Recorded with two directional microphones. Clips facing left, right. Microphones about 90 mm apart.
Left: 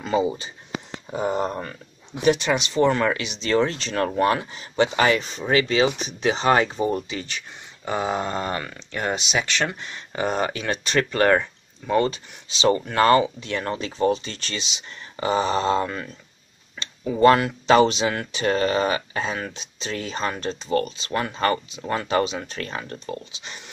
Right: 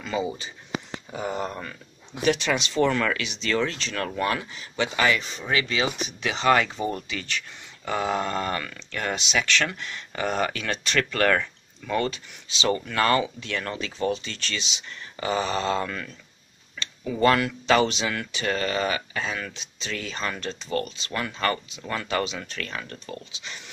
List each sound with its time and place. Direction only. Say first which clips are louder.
0.0 s a sound: left 6 dB; 35° left (ahead or behind)
1.1 s speech: left 6 dB; 30° left (ahead or behind)
2.5 s speech: left 3 dB; 15° left (ahead or behind)